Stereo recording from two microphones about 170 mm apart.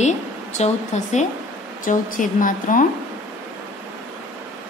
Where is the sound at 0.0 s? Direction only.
45° left (ahead or behind).